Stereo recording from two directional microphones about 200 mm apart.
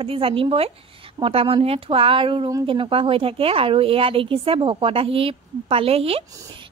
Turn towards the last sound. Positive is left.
turn(degrees=-30)  # may be behind; listen again after turning